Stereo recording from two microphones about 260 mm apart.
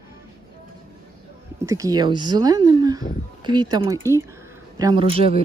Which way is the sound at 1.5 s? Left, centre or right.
Centre.